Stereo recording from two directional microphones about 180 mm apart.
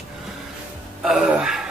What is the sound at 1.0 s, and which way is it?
Speech, centre (ahead or behind).